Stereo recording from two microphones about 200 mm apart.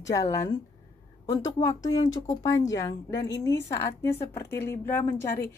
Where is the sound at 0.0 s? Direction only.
15° left (ahead or behind).